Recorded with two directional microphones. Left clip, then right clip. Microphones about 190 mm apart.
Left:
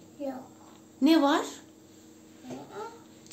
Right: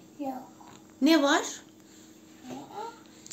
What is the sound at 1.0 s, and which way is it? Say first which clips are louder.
Speech: even; 5° right (ahead or behind).